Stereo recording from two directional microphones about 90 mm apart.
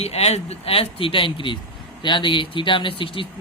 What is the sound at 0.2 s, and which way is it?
A man's voice, 90° left.